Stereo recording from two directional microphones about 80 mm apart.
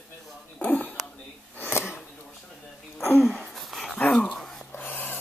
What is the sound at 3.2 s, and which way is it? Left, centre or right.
Wheeze, centre.